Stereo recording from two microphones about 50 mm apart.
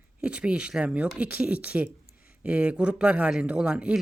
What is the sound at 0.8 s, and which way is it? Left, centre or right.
Speech, right.